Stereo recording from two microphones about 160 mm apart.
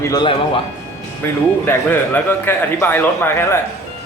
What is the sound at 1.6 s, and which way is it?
Speech, 10° left (ahead or behind).